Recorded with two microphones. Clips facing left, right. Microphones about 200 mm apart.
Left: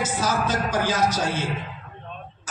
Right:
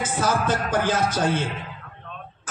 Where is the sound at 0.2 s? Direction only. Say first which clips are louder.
Right 3 dB; 55° right (ahead or behind).